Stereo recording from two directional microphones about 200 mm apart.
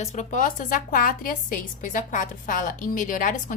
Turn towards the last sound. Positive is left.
turn(degrees=40)  # may be behind; listen again after turning